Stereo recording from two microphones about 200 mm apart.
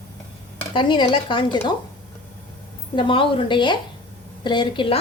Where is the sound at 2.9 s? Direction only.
25° left (ahead or behind).